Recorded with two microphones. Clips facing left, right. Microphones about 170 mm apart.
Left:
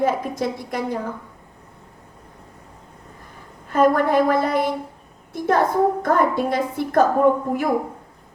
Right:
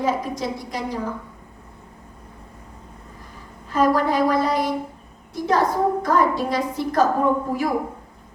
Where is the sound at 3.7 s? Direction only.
55° left (ahead or behind).